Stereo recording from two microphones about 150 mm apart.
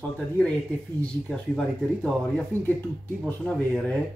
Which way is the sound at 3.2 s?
10° left (ahead or behind).